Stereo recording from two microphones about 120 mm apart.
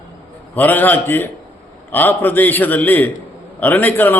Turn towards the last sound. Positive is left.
turn(degrees=15)  # may be behind; listen again after turning